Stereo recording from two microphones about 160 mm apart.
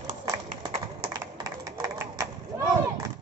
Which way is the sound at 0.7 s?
40° right (ahead or behind).